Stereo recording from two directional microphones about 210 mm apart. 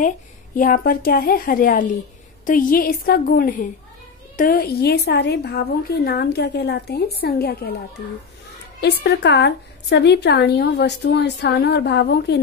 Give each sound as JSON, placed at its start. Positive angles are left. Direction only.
{"t": 0.6, "sound": "a woman's voice", "side_deg": 40}
{"t": 8.8, "sound": "a woman's voice", "side_deg": 55}